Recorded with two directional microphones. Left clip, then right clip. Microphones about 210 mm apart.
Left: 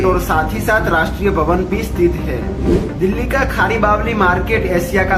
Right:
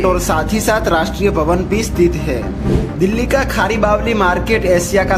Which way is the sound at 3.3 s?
40° right (ahead or behind).